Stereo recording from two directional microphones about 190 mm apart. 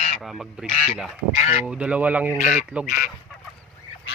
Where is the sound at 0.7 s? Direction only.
40° left (ahead or behind).